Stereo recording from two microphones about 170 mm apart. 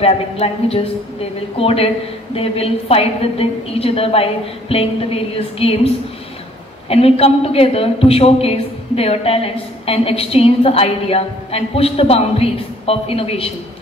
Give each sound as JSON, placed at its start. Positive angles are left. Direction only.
{"t": 0.0, "sound": "a woman's voice", "side_deg": 35}